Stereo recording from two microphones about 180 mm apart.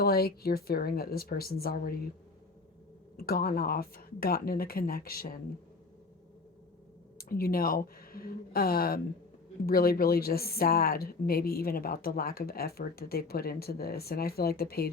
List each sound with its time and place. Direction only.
0.0 s a woman's voice: 60° left (ahead or behind)
3.2 s a woman's voice: 55° left (ahead or behind)
7.2 s a woman's voice: 55° left (ahead or behind)